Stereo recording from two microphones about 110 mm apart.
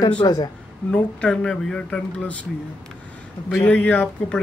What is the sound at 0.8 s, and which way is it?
Speech, 5° left (ahead or behind).